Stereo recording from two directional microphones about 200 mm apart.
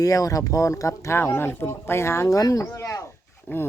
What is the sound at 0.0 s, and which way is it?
Speech, 15° left (ahead or behind).